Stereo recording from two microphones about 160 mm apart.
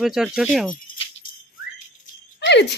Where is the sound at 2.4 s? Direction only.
90° left.